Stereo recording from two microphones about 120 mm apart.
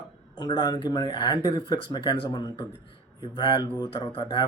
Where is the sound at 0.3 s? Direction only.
35° left (ahead or behind).